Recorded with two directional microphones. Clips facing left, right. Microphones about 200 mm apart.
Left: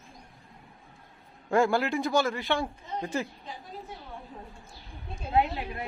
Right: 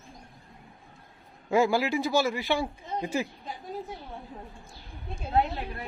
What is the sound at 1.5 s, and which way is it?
Speech, 5° right (ahead or behind).